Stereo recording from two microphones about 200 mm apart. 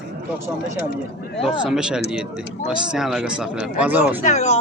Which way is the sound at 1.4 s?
Centre (ahead or behind).